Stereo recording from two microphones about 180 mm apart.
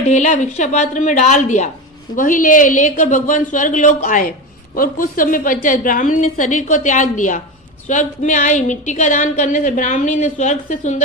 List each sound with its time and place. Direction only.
0.1 s a woman's voice: 40° left (ahead or behind)